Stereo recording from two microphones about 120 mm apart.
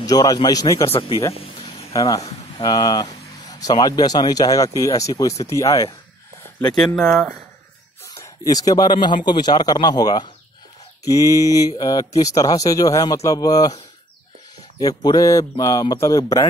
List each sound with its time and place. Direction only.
0.0 s speech: 30° left (ahead or behind)
0.8 s speech: 50° left (ahead or behind)
1.3 s a sound: 55° left (ahead or behind)
2.0 s speech: 30° left (ahead or behind)
7.0 s speech: 5° left (ahead or behind)
8.1 s speech: 30° left (ahead or behind)
14.8 s speech: 35° left (ahead or behind)